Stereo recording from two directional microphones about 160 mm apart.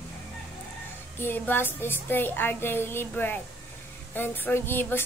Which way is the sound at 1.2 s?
10° left (ahead or behind).